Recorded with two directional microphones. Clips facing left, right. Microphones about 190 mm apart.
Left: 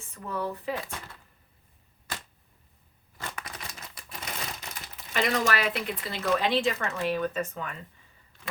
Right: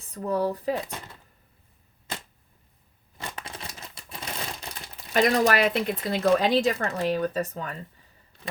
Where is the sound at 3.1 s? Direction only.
30° right (ahead or behind).